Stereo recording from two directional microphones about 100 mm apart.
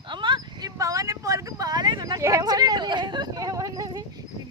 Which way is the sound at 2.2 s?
35° right (ahead or behind).